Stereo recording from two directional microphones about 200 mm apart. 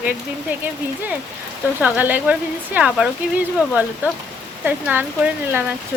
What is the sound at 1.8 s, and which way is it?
Speech, 10° right (ahead or behind).